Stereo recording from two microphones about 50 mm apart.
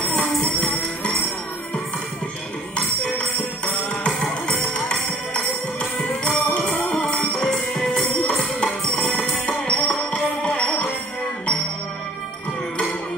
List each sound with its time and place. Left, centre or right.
0.2 s music: left
3.2 s music: centre
5.3 s music: centre
6.3 s music: left
7.2 s music: centre
8.6 s music: centre
9.5 s music: left